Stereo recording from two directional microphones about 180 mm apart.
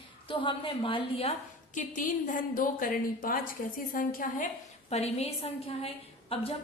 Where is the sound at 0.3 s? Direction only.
30° left (ahead or behind).